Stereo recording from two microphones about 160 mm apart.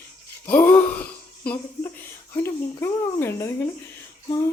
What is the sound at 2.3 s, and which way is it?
Speech, 15° left (ahead or behind).